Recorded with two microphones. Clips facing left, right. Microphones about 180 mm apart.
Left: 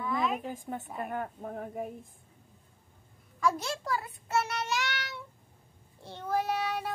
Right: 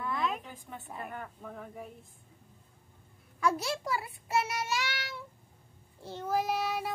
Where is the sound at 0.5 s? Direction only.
45° left (ahead or behind).